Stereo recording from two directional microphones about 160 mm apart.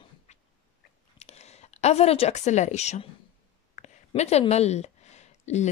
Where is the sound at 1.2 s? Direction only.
40° left (ahead or behind).